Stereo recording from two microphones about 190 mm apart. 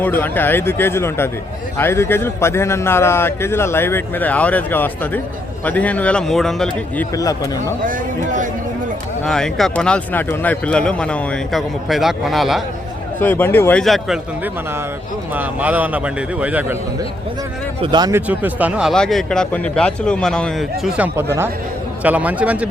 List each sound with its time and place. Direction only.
0.0 s a man's voice: 10° left (ahead or behind)
7.9 s speech: 45° right (ahead or behind)
9.2 s speech: 5° left (ahead or behind)
13.1 s a man's voice: 10° left (ahead or behind); by 16.7 s 10° right (ahead or behind)
17.8 s speech: 20° right (ahead or behind)
18.3 s speech: 10° right (ahead or behind)